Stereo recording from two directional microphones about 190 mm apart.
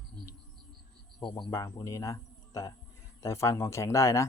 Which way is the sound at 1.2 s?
20° left (ahead or behind).